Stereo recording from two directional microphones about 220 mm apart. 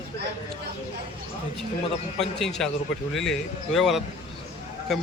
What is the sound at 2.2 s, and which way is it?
Speech, centre (ahead or behind).